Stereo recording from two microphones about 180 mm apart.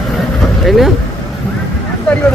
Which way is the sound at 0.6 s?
Centre (ahead or behind).